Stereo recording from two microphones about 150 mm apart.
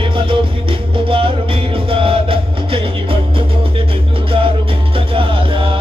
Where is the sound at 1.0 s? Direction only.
35° right (ahead or behind).